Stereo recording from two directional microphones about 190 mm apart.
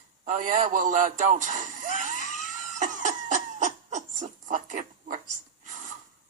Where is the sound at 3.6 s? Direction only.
40° right (ahead or behind).